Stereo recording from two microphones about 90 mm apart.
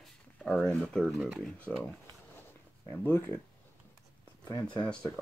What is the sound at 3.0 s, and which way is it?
Speech, 25° left (ahead or behind).